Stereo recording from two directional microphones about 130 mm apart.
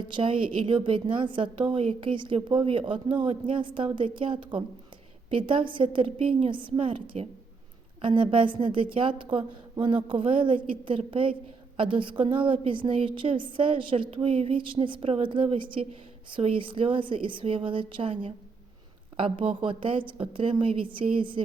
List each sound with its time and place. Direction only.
0.1 s a woman's voice: 40° right (ahead or behind)